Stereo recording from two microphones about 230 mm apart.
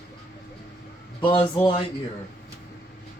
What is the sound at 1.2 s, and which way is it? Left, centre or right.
Speech, left.